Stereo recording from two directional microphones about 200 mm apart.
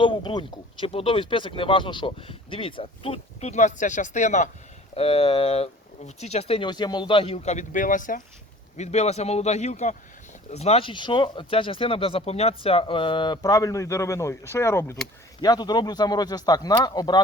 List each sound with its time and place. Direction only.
0.0 s speech: 25° left (ahead or behind)